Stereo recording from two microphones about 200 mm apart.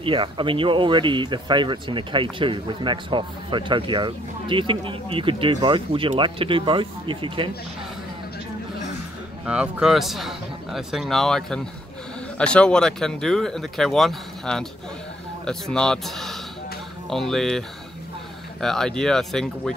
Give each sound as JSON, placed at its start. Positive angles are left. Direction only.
{"t": 0.0, "sound": "speech", "side_deg": -25}
{"t": 9.5, "sound": "speech", "side_deg": -5}